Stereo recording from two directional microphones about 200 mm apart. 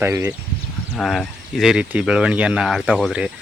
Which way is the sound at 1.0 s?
Centre (ahead or behind).